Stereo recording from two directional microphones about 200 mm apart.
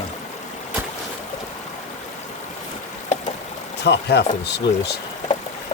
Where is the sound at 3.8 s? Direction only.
55° left (ahead or behind).